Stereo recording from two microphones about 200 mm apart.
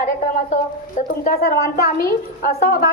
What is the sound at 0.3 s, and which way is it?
A woman's voice, 40° left (ahead or behind).